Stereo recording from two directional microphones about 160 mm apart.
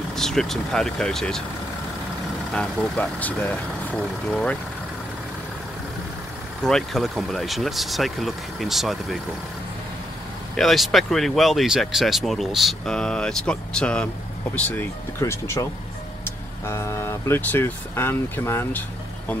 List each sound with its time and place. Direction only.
0.1 s speech: 5° left (ahead or behind)
2.5 s speech: 5° left (ahead or behind)
6.6 s speech: centre (ahead or behind)
10.5 s speech: centre (ahead or behind)